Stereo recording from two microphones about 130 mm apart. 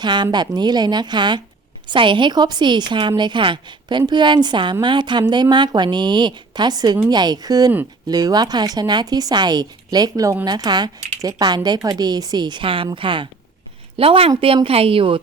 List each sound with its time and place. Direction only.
0.0 s a woman's voice: 35° right (ahead or behind)